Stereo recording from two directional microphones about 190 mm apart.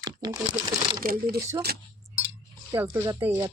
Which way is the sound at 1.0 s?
50° right (ahead or behind).